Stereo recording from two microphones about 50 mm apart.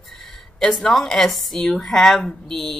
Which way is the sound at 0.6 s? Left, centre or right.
Centre.